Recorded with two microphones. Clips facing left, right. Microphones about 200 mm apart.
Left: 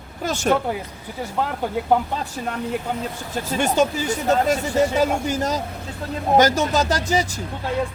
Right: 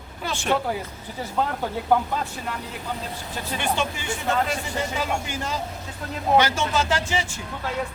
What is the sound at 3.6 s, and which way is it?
Speech, 40° left (ahead or behind).